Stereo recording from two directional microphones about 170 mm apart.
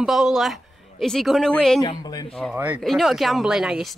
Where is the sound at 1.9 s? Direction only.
25° left (ahead or behind).